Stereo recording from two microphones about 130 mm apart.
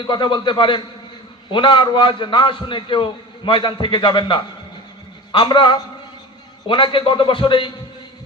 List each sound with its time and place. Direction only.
0.0 s a man's voice: 35° left (ahead or behind)